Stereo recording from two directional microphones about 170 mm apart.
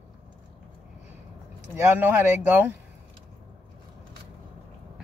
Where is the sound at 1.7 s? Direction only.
10° right (ahead or behind).